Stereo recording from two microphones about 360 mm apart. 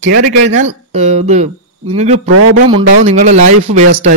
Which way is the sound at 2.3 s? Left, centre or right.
Right.